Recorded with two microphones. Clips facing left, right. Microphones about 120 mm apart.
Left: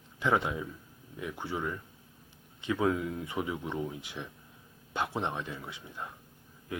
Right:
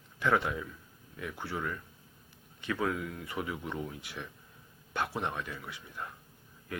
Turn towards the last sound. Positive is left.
turn(degrees=20)  # may be behind; listen again after turning